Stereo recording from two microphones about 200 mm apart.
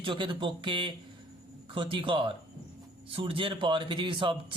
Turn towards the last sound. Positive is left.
turn(degrees=-25)  # may be behind; listen again after turning